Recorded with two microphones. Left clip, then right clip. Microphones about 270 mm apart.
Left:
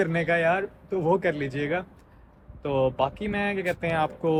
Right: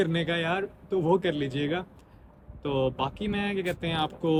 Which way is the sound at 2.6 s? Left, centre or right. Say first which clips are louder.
Left 4 dB; centre.